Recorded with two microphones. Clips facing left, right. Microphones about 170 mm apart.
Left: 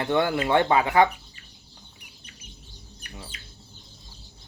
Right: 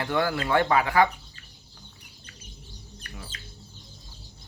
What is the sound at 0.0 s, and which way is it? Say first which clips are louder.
Speech: left 3 dB; 25° left (ahead or behind).